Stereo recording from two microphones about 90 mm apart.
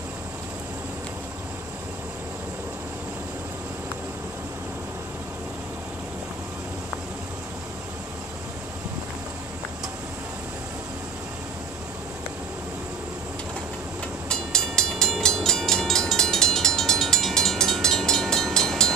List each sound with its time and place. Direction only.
14.3 s train: 5° left (ahead or behind)